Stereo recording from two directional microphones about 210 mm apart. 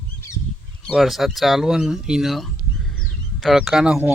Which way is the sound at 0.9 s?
Centre (ahead or behind).